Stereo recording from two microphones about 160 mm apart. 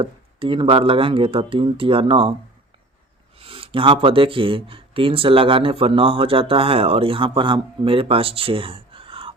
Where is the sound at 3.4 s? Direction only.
35° right (ahead or behind).